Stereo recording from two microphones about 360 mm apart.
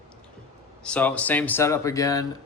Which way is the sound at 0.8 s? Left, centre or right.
Centre.